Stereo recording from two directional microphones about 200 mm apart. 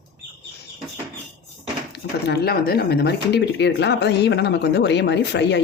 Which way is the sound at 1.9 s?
50° left (ahead or behind).